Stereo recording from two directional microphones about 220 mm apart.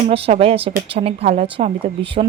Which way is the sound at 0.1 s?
25° right (ahead or behind).